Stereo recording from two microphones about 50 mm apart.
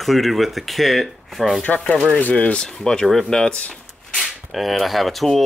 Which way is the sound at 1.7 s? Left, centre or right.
Left.